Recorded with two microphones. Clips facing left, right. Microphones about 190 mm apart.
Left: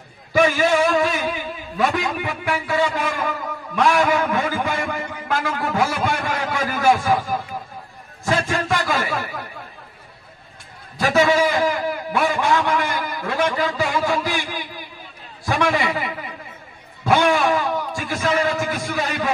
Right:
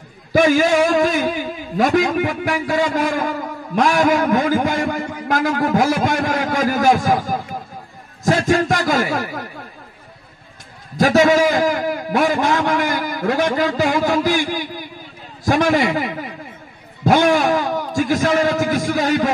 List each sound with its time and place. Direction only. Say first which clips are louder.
0.3 s a sound: right 3 dB; 45° right (ahead or behind)
1.8 s a man's voice: right 6 dB; 45° right (ahead or behind)
11.0 s a man's voice: right 4 dB; 45° right (ahead or behind)